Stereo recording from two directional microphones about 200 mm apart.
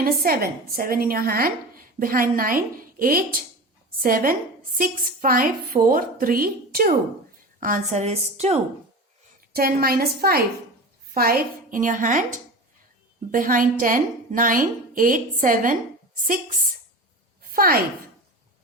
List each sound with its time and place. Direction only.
0.0 s a woman's voice: 50° right (ahead or behind); by 8.5 s 30° right (ahead or behind)
9.5 s a woman's voice: 50° right (ahead or behind)
13.3 s a woman's voice: 45° right (ahead or behind)
17.4 s a sound: 45° right (ahead or behind)